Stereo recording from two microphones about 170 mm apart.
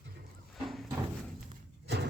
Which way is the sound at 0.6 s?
Centre (ahead or behind).